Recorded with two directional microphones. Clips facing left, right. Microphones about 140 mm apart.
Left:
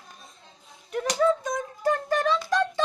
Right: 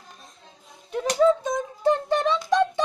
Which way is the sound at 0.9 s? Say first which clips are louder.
Right 3 dB; 25° right (ahead or behind).